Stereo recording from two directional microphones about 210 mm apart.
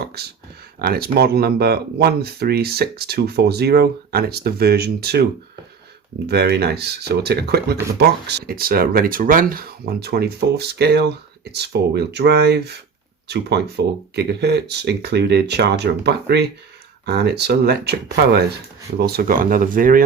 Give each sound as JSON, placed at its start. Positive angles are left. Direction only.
{"t": 0.8, "sound": "speech", "side_deg": -45}
{"t": 6.2, "sound": "speech", "side_deg": -50}
{"t": 18.9, "sound": "speech", "side_deg": -50}